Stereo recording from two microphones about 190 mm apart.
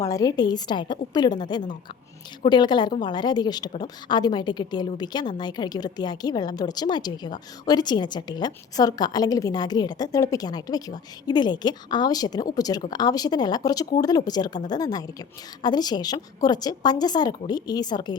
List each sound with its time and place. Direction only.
0.0 s a woman's voice: 20° left (ahead or behind)